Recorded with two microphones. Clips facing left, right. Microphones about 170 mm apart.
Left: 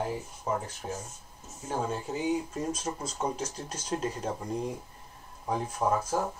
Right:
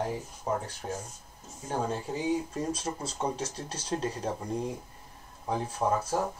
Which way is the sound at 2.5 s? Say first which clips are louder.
Even; 35° right (ahead or behind).